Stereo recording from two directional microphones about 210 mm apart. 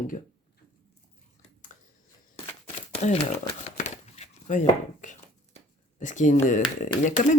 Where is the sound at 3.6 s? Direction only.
35° left (ahead or behind).